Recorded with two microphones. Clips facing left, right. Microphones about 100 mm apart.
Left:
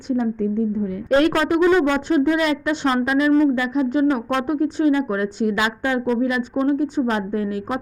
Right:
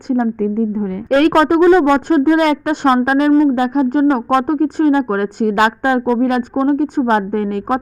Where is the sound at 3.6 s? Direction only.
50° right (ahead or behind).